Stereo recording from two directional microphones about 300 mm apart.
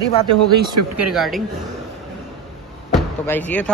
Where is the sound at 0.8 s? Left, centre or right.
Right.